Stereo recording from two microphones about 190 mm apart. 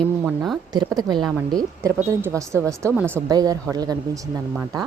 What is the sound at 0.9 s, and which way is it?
Speech, 20° right (ahead or behind).